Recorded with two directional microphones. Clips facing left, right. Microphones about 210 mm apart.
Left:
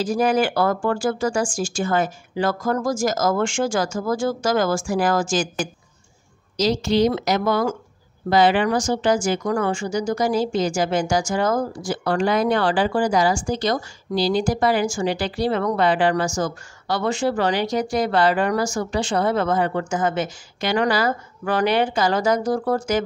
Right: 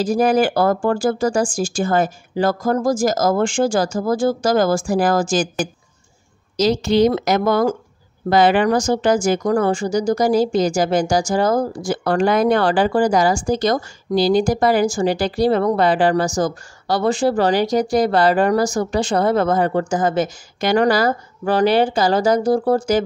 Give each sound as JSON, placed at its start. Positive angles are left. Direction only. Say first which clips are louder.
{"t": 0.0, "sound": "speech", "louder": "right 4 dB", "side_deg": -40}
{"t": 6.5, "sound": "speech", "louder": "right 3 dB", "side_deg": -50}